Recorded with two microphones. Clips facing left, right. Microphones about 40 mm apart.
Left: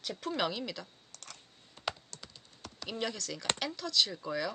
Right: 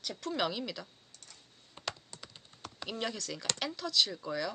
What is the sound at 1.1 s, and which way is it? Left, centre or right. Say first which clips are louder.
Typing: left 6 dB; left.